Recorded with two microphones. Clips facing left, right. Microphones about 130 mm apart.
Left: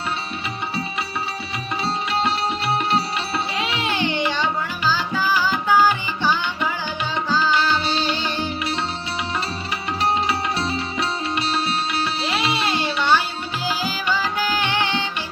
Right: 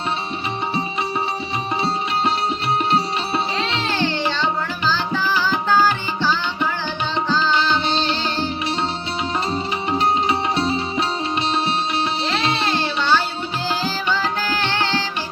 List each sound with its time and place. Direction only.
3.8 s music: 15° left (ahead or behind)
4.9 s tabla: 10° left (ahead or behind)
7.3 s music: 10° left (ahead or behind)
9.9 s music: 20° right (ahead or behind)
12.8 s music: 15° left (ahead or behind)